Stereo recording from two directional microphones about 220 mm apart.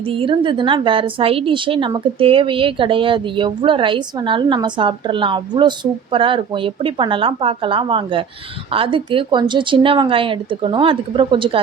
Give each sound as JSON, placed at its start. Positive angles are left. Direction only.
{"t": 0.1, "sound": "a woman's voice", "side_deg": -25}